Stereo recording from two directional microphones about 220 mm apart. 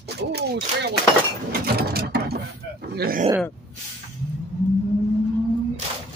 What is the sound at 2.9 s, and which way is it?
Speech, 45° right (ahead or behind).